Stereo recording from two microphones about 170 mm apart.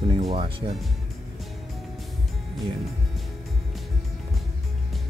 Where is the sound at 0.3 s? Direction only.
35° right (ahead or behind).